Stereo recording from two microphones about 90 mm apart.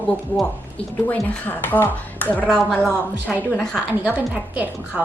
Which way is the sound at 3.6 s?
10° left (ahead or behind).